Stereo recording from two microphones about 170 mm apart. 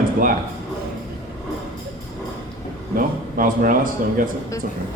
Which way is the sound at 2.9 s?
55° right (ahead or behind).